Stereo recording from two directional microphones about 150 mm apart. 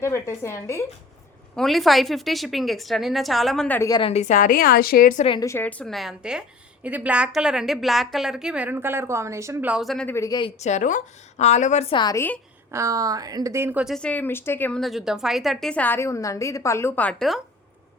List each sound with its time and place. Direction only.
0.0 s a woman's voice: 20° left (ahead or behind)
1.5 s a woman's voice: centre (ahead or behind)
3.8 s speech: 25° left (ahead or behind)
4.0 s a woman's voice: 45° left (ahead or behind); by 5.2 s 65° left (ahead or behind)
5.4 s a woman's voice: 15° left (ahead or behind); by 10.1 s centre (ahead or behind)
10.1 s speech: 20° left (ahead or behind)
10.6 s a woman's voice: 55° left (ahead or behind)
11.9 s speech: 25° left (ahead or behind)
12.7 s a woman's voice: 20° right (ahead or behind)
13.8 s a woman's voice: 5° left (ahead or behind)
14.8 s a woman's voice: centre (ahead or behind)